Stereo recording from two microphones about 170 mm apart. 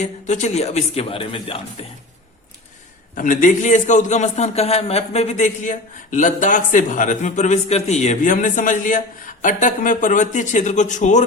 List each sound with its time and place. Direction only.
0.0 s speech: 45° left (ahead or behind)
3.2 s a man's voice: 50° left (ahead or behind)